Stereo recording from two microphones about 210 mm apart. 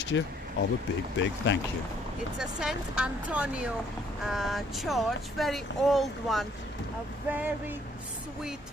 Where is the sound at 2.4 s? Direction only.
5° right (ahead or behind).